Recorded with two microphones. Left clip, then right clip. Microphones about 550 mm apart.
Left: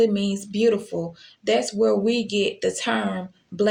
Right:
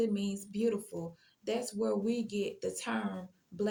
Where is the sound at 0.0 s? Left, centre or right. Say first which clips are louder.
Left 13 dB; right.